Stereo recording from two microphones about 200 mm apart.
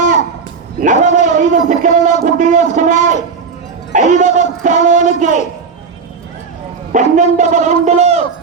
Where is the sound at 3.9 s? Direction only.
40° right (ahead or behind).